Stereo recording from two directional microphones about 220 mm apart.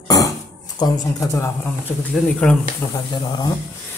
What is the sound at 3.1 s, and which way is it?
Speech, 20° left (ahead or behind).